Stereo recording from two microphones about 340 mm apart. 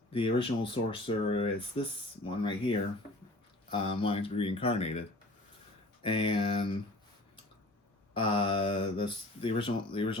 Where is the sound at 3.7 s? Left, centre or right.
Centre.